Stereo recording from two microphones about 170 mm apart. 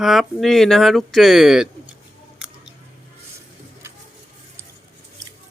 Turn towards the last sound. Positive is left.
turn(degrees=-15)  # may be behind; listen again after turning